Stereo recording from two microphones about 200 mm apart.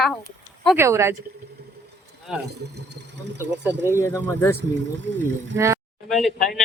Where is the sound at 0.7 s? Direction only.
15° right (ahead or behind).